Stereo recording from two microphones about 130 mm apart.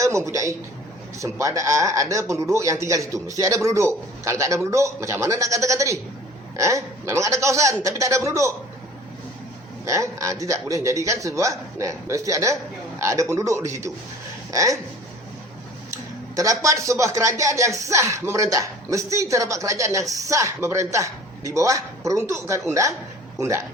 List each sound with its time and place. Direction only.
0.0 s speech: 25° right (ahead or behind)
9.8 s speech: 25° right (ahead or behind)
15.9 s speech: 25° right (ahead or behind)